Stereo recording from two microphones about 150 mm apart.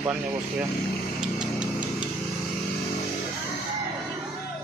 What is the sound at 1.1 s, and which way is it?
Music, 5° right (ahead or behind).